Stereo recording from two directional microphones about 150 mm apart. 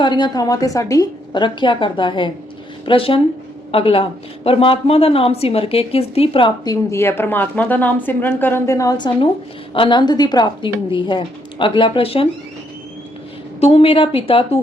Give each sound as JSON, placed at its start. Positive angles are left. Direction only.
{"t": 0.0, "sound": "a woman's voice", "side_deg": 30}
{"t": 6.7, "sound": "a woman's voice", "side_deg": 15}
{"t": 13.6, "sound": "a woman's voice", "side_deg": 40}